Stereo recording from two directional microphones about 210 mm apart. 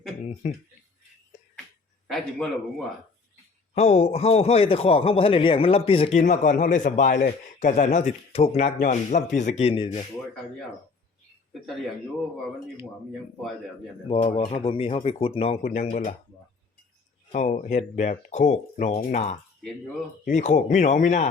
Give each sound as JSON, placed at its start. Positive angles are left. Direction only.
{"t": 2.0, "sound": "speech", "side_deg": 0}
{"t": 3.8, "sound": "a man's voice", "side_deg": 30}
{"t": 14.1, "sound": "speech", "side_deg": 25}
{"t": 17.3, "sound": "a man's voice", "side_deg": 40}